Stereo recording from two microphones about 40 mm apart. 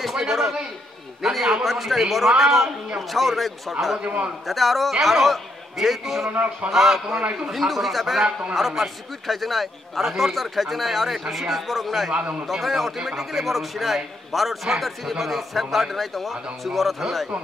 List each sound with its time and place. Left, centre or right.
0.0 s a sound: centre
1.2 s a man's voice: centre
6.3 s speech: right
6.7 s a man's voice: centre
12.1 s a man's voice: right
12.4 s a man's voice: centre